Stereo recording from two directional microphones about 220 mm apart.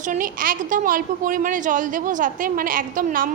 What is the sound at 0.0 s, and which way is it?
A woman's voice, 35° right (ahead or behind).